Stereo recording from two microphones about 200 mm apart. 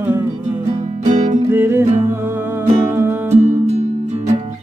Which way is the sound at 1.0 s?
40° right (ahead or behind).